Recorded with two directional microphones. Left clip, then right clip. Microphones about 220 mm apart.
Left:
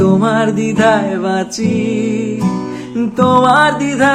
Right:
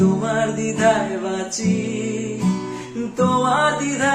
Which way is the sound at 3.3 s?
45° left (ahead or behind).